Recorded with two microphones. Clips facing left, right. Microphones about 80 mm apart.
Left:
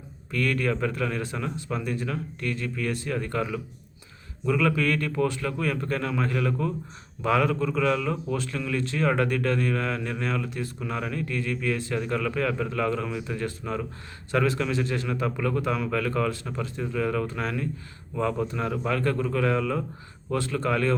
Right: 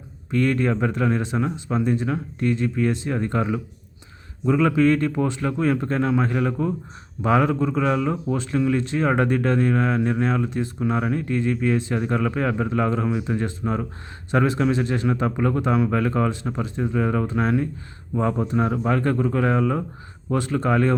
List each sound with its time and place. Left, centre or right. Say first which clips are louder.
0.3 s speech: right 5 dB; right